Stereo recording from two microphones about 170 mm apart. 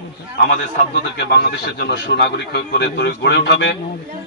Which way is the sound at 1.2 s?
80° left.